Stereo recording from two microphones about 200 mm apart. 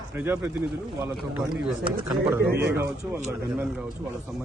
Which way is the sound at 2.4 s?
55° right (ahead or behind).